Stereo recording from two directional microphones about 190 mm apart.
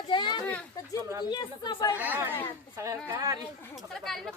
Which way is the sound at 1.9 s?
10° right (ahead or behind).